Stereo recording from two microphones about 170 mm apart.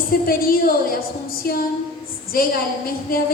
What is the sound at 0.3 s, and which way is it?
A woman's voice, 60° left (ahead or behind).